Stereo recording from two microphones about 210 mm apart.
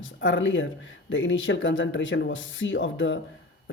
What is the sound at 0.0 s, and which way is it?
Speech, 65° left (ahead or behind).